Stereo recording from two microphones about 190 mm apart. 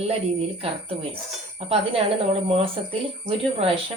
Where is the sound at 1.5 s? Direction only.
30° right (ahead or behind).